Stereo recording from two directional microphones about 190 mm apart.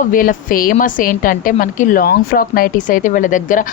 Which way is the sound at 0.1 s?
45° left (ahead or behind).